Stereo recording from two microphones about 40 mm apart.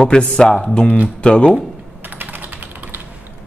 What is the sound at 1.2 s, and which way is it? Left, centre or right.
Speech, left.